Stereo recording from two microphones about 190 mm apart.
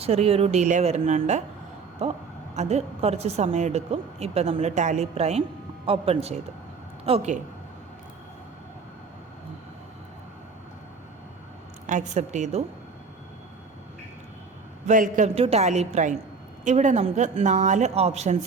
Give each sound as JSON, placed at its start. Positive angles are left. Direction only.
{"t": 0.0, "sound": "a woman's voice", "side_deg": -35}
{"t": 11.9, "sound": "a woman's voice", "side_deg": -40}
{"t": 14.8, "sound": "a man's voice", "side_deg": -45}
{"t": 15.4, "sound": "a woman's voice", "side_deg": -35}